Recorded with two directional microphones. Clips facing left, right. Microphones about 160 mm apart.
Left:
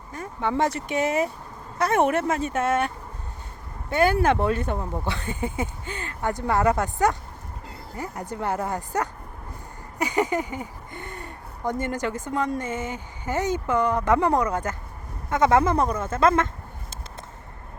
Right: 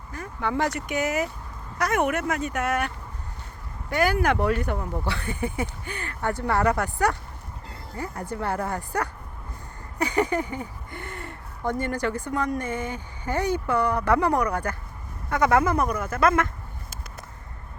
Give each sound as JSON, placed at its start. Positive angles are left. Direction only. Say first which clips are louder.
{"t": 0.1, "sound": "speech", "louder": "left 2 dB", "side_deg": 20}